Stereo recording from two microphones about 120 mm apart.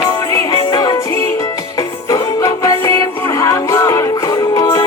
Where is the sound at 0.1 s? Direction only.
30° left (ahead or behind).